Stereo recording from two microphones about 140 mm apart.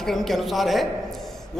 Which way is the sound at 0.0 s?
Centre (ahead or behind).